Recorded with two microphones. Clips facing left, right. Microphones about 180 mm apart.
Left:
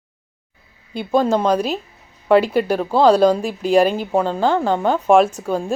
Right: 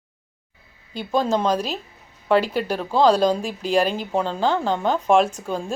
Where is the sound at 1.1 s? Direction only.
10° left (ahead or behind).